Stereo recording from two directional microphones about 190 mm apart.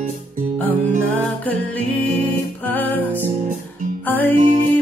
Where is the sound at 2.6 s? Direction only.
10° left (ahead or behind).